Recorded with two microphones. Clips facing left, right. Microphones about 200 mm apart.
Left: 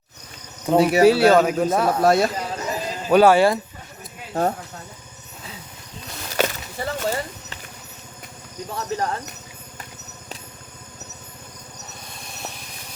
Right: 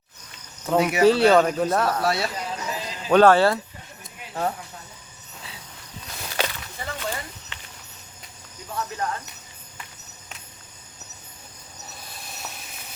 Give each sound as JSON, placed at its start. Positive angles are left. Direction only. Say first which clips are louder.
{"t": 0.8, "sound": "speech", "louder": "left 5 dB", "side_deg": 35}
{"t": 1.0, "sound": "speech", "louder": "even", "side_deg": 5}
{"t": 2.0, "sound": "clip-clop", "louder": "left 7 dB", "side_deg": 45}
{"t": 3.1, "sound": "speech", "louder": "left 1 dB", "side_deg": 10}
{"t": 6.3, "sound": "a sound", "louder": "left 6 dB", "side_deg": 45}
{"t": 8.7, "sound": "speech", "louder": "left 3 dB", "side_deg": 35}